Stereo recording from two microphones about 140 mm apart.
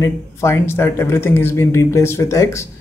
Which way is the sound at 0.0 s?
20° left (ahead or behind).